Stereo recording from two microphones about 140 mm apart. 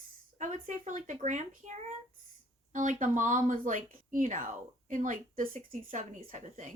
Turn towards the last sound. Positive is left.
turn(degrees=-60)  # may be behind; listen again after turning